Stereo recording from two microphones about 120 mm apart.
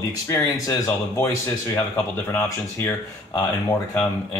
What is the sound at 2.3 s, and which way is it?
Speech, 20° left (ahead or behind).